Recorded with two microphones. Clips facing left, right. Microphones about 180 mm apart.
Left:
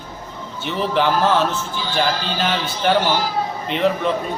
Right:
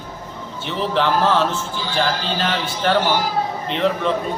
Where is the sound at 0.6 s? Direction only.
5° left (ahead or behind).